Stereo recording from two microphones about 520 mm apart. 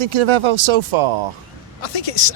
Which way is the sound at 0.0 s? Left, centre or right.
Right.